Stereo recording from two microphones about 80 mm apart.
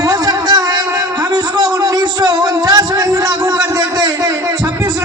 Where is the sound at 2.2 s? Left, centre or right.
Right.